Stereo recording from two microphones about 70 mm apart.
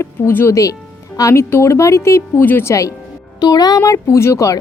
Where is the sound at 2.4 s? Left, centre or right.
Left.